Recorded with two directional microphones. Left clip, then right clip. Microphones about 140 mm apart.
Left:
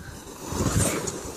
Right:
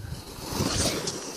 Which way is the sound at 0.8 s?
25° left (ahead or behind).